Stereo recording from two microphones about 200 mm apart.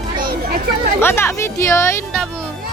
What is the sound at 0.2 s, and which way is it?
Chatter, 45° right (ahead or behind).